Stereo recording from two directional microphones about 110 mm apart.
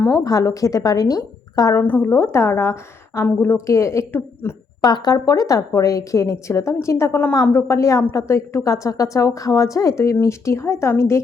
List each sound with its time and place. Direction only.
0.3 s speech: 30° left (ahead or behind)
1.7 s a woman's voice: 15° left (ahead or behind)
4.8 s a woman's voice: 40° left (ahead or behind)